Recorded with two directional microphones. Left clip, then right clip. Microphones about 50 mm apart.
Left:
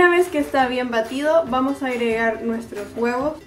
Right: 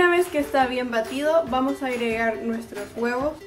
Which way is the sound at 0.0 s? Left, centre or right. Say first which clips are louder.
Left 4 dB; centre.